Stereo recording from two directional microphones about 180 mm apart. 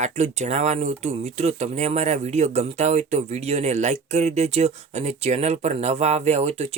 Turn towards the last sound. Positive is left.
turn(degrees=-35)  # may be behind; listen again after turning